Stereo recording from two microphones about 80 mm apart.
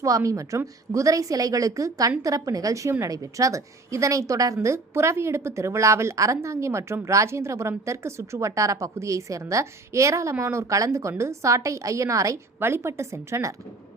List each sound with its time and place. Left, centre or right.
0.0 s a woman's voice: right
12.5 s a woman's voice: right